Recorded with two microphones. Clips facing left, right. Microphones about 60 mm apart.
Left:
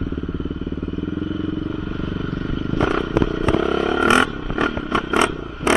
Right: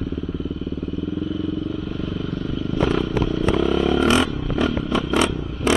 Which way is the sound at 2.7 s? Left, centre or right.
Left.